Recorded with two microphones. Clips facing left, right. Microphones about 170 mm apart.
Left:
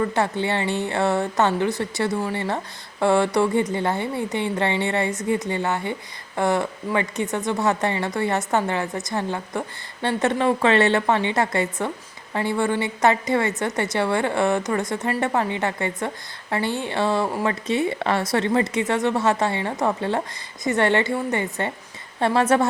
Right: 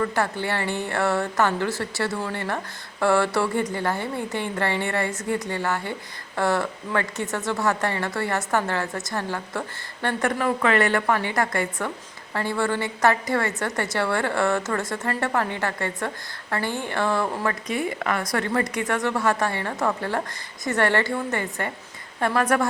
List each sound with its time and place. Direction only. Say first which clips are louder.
0.0 s speech: left 2 dB; 20° left (ahead or behind)